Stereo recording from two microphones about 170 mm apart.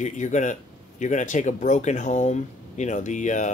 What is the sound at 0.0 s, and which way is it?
Speech, 45° left (ahead or behind).